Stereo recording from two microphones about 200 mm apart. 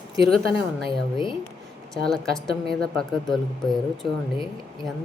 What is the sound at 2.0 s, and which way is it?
Speech, centre (ahead or behind).